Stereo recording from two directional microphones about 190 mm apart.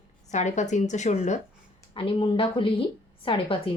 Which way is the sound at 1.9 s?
25° left (ahead or behind).